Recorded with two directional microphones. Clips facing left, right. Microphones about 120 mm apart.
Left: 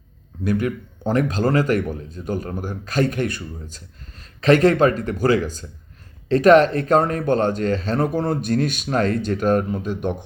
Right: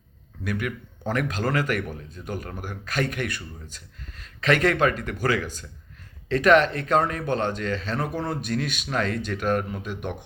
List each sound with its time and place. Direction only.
0.4 s speech: 30° left (ahead or behind)